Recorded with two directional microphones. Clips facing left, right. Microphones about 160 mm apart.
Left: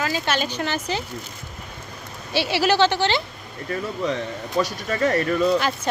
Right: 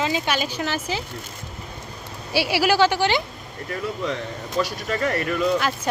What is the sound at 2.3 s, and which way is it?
Speech, 10° right (ahead or behind).